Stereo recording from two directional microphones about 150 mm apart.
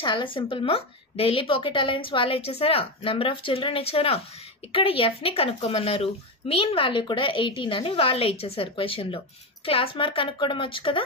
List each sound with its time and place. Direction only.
0.0 s speech: 30° left (ahead or behind)